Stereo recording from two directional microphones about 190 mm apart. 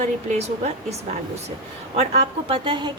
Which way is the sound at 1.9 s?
35° right (ahead or behind).